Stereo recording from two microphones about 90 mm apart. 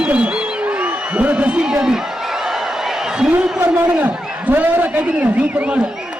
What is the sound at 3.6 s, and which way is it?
A man's voice, 20° right (ahead or behind).